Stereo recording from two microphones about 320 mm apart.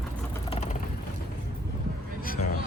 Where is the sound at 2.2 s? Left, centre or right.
Left.